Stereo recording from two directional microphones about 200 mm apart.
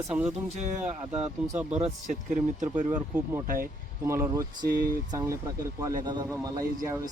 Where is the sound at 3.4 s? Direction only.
45° right (ahead or behind).